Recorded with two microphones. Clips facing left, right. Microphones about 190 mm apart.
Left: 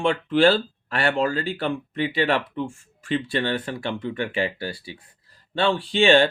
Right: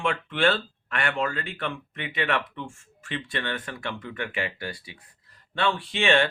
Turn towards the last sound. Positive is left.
turn(degrees=30)  # may be behind; listen again after turning